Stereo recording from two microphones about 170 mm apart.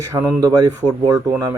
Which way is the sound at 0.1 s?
20° right (ahead or behind).